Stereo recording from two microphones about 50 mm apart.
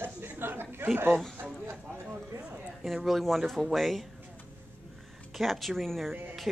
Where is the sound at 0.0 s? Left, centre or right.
Right.